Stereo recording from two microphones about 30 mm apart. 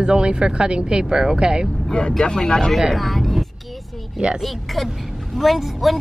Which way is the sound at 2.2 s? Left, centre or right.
Left.